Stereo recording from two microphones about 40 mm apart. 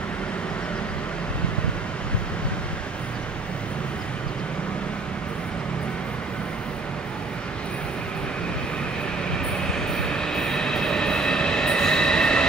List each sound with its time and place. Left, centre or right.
9.3 s train: centre